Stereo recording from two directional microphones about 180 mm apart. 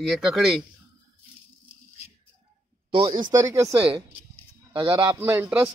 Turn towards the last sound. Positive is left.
turn(degrees=-10)  # may be behind; listen again after turning